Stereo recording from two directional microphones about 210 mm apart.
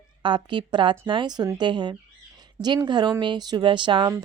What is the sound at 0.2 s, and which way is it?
Speech, 20° right (ahead or behind).